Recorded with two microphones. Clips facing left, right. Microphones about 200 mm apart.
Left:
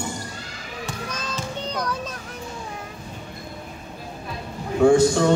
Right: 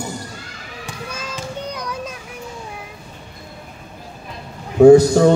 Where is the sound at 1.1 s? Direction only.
10° right (ahead or behind).